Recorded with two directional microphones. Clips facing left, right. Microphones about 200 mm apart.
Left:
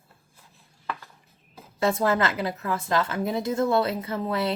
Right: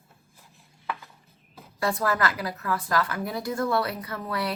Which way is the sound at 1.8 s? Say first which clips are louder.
Left 3 dB; 25° left (ahead or behind).